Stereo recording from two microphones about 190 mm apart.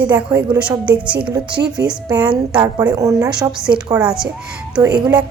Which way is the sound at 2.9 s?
20° right (ahead or behind).